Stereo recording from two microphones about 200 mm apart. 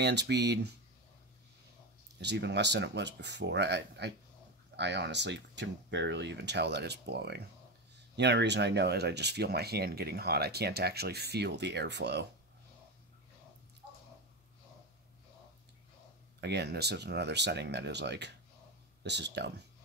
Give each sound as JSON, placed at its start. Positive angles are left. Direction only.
{"t": 0.0, "sound": "speech", "side_deg": -60}
{"t": 2.1, "sound": "speech", "side_deg": -60}
{"t": 16.3, "sound": "speech", "side_deg": -60}